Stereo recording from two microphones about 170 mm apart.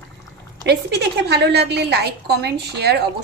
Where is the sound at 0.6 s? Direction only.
80° right.